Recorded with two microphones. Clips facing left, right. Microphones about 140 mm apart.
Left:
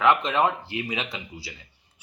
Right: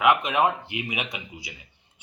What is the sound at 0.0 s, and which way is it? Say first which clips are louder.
A man's voice: even; 15° right (ahead or behind).